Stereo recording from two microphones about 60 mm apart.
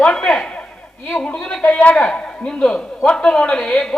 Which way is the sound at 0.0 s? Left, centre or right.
Centre.